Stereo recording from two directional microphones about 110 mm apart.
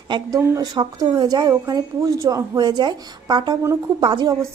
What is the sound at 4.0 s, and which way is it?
Speech, 50° right (ahead or behind).